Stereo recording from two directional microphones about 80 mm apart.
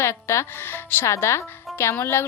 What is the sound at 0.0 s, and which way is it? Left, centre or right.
A woman's voice, left.